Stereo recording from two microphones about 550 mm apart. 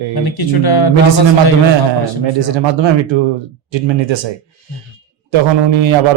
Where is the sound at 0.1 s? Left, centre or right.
Left.